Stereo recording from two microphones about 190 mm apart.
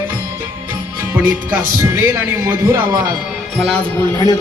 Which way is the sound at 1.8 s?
15° right (ahead or behind).